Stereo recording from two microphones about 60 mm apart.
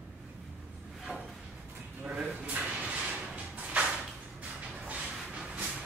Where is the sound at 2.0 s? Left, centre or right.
Right.